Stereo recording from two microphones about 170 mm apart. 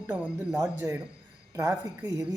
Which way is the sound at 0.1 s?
15° right (ahead or behind).